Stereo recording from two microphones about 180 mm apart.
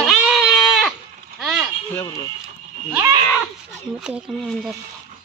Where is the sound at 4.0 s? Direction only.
Centre (ahead or behind).